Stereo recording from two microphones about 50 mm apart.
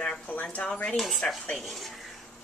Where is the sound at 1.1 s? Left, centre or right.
Centre.